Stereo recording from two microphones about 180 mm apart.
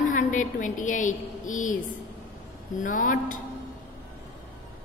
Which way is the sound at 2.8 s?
45° left (ahead or behind).